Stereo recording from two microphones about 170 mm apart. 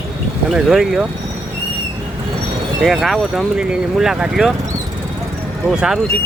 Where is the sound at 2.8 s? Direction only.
Centre (ahead or behind).